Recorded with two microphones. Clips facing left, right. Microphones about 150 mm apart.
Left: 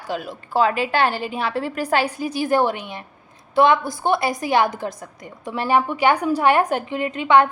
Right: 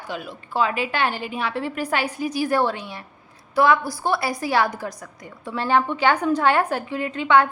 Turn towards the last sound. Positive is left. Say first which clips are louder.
# left 2 dB
turn(degrees=20)  # may be behind; listen again after turning